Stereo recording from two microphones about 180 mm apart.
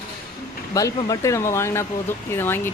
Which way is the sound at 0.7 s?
20° left (ahead or behind).